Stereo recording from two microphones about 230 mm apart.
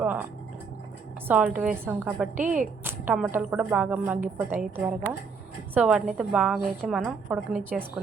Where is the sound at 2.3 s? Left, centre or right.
Right.